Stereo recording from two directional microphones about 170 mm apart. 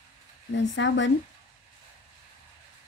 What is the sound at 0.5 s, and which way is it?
Speech, 90° left.